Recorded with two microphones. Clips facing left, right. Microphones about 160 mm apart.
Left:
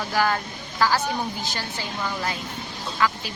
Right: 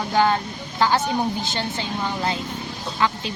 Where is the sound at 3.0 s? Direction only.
25° right (ahead or behind).